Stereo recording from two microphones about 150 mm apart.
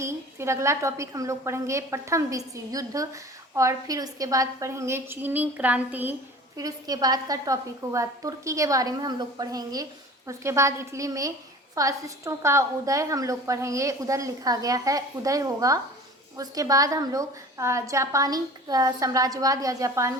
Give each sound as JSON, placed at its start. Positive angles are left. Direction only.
{"t": 0.0, "sound": "a woman's voice", "side_deg": -20}
{"t": 6.6, "sound": "a woman's voice", "side_deg": -25}